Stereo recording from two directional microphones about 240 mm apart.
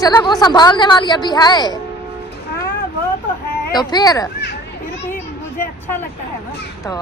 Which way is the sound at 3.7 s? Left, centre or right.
Centre.